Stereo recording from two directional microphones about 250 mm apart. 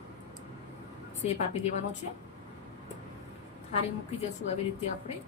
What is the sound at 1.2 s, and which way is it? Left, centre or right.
Speech, left.